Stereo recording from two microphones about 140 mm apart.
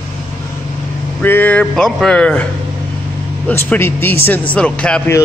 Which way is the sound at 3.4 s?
15° left (ahead or behind).